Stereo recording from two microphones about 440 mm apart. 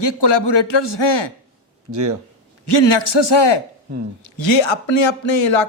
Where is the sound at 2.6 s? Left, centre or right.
Left.